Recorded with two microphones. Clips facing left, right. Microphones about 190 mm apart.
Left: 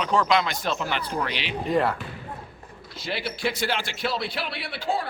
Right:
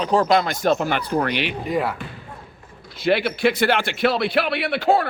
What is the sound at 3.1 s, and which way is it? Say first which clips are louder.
Speech: right 10 dB; 65° right (ahead or behind).